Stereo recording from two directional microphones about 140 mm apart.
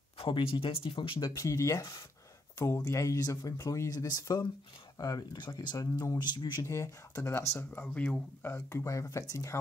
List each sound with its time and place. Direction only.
0.2 s speech: 40° left (ahead or behind)
1.2 s speech: 25° left (ahead or behind)
6.6 s speech: 20° left (ahead or behind)